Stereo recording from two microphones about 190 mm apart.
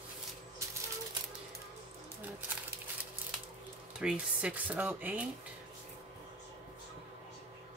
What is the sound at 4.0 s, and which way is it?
Speech, 5° right (ahead or behind).